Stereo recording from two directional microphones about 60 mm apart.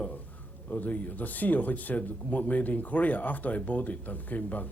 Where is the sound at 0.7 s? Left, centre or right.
Left.